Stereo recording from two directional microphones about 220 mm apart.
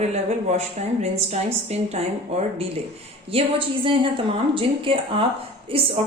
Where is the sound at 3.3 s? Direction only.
25° right (ahead or behind).